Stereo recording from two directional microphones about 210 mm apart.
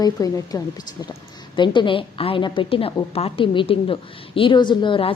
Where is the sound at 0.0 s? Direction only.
15° left (ahead or behind).